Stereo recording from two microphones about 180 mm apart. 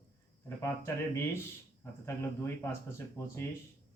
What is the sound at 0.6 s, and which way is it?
Speech, 15° left (ahead or behind).